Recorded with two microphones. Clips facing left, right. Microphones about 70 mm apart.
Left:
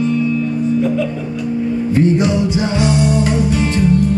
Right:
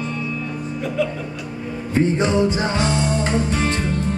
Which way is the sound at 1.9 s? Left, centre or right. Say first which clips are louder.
Left 2 dB; right.